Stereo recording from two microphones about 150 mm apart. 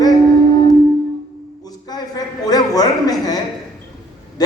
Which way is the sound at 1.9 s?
25° left (ahead or behind).